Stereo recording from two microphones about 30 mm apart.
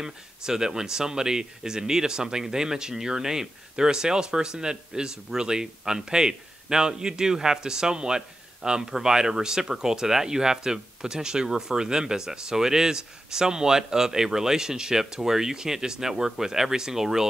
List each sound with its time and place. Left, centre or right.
0.0 s speech: centre